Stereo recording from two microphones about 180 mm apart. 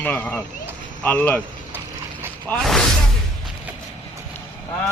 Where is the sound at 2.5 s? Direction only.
5° left (ahead or behind).